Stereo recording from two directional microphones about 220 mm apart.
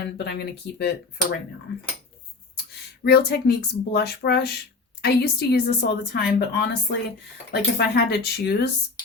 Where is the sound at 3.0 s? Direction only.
45° left (ahead or behind).